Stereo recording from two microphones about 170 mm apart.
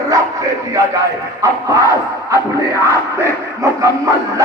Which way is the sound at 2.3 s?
15° right (ahead or behind).